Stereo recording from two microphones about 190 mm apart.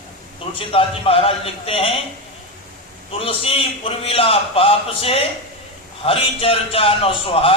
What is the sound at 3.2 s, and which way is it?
A man's voice, 30° left (ahead or behind).